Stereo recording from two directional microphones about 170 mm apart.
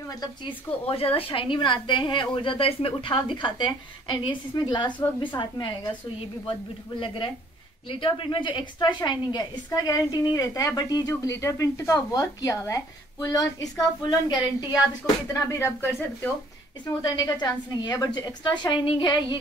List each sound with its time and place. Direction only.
0.8 s a woman's voice: 35° left (ahead or behind)
7.9 s a woman's voice: 30° left (ahead or behind)